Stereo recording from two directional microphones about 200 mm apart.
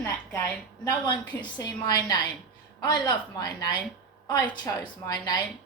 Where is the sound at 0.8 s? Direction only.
20° left (ahead or behind).